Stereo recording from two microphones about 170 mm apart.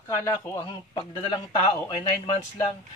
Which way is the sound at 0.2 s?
20° left (ahead or behind).